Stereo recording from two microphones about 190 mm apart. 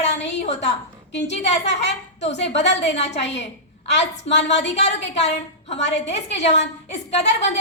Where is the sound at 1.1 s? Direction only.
70° left (ahead or behind).